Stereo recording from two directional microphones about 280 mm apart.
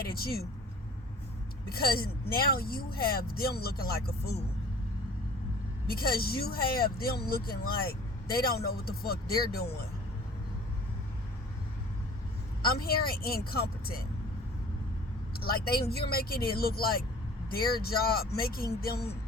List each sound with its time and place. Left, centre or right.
0.1 s speech: left
1.7 s speech: left
5.9 s speech: left
12.6 s speech: left
15.4 s speech: left